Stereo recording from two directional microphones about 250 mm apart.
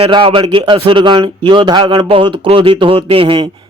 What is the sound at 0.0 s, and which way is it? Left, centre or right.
Speech, right.